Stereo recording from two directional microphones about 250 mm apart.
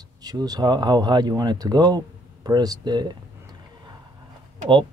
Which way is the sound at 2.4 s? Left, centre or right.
Centre.